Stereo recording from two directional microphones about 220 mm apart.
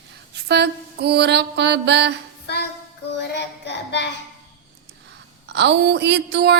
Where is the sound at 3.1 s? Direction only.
50° left (ahead or behind).